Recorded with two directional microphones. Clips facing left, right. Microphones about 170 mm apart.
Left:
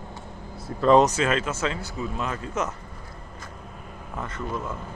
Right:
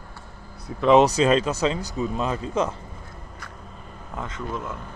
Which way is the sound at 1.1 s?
35° right (ahead or behind).